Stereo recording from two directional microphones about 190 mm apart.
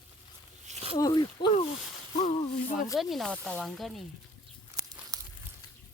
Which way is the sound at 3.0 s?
Centre (ahead or behind).